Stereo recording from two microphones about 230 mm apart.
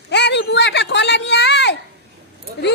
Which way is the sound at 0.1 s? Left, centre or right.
Left.